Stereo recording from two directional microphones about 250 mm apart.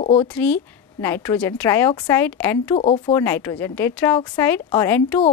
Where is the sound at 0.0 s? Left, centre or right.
Left.